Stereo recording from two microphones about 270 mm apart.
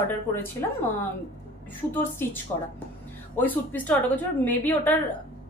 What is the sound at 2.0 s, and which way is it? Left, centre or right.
A woman's voice, centre.